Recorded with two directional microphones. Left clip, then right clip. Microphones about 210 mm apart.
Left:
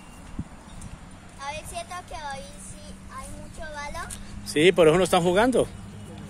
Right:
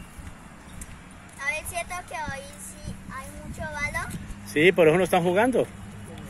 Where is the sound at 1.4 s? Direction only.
20° right (ahead or behind).